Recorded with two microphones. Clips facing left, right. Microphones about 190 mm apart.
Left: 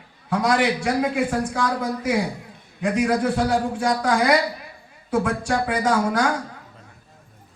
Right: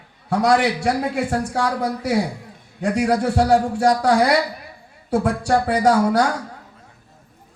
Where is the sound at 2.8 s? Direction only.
35° right (ahead or behind).